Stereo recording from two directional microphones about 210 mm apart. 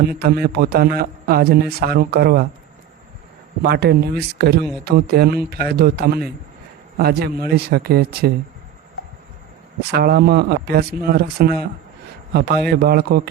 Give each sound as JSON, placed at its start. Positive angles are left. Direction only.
{"t": 0.1, "sound": "a man's voice", "side_deg": -45}
{"t": 3.6, "sound": "a man's voice", "side_deg": -50}
{"t": 9.9, "sound": "a man's voice", "side_deg": -50}